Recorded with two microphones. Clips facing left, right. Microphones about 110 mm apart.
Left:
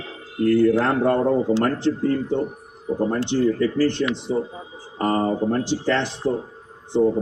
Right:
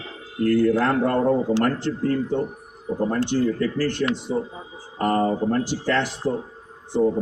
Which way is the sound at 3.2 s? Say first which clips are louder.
Left 2 dB; 20° left (ahead or behind).